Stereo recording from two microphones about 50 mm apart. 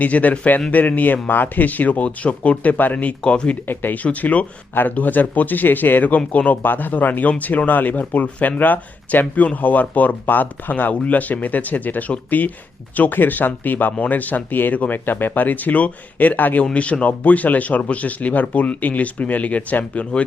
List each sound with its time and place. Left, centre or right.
0.0 s a man's voice: left
3.7 s a man's voice: left
4.0 s a man's voice: left